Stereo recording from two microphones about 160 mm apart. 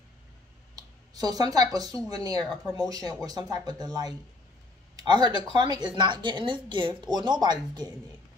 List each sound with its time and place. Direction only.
1.1 s speech: 25° right (ahead or behind)